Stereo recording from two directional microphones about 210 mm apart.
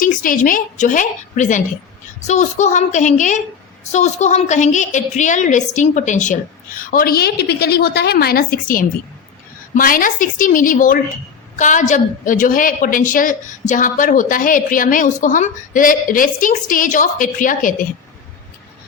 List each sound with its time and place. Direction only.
0.0 s a woman's voice: 40° left (ahead or behind)